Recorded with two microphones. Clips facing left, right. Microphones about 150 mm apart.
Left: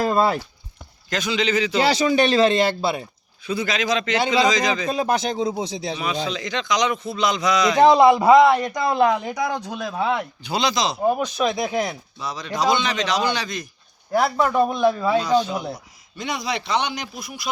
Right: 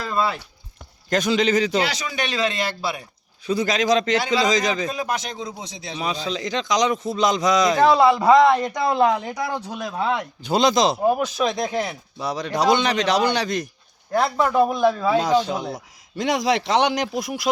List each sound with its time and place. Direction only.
0.0 s a sound: 45° left (ahead or behind)
1.1 s a man's voice: 45° right (ahead or behind)
1.8 s speech: 30° left (ahead or behind)
3.4 s a man's voice: 40° right (ahead or behind)
4.9 s speech: 30° left (ahead or behind)
6.0 s a man's voice: 35° right (ahead or behind)
7.8 s speech: 15° left (ahead or behind)
10.4 s a man's voice: 45° right (ahead or behind)
11.0 s a man's voice: 5° right (ahead or behind)
12.2 s a man's voice: 65° right (ahead or behind)
14.1 s a man's voice: 5° left (ahead or behind)
15.2 s a man's voice: 90° right